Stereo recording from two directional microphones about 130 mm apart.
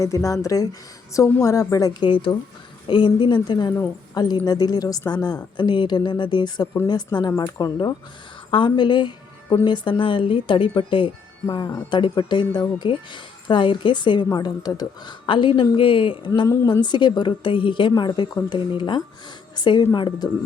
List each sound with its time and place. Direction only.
0.0 s a woman's voice: 25° left (ahead or behind)